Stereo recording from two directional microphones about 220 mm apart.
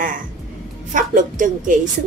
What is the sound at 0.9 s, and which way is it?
Speech, 35° right (ahead or behind).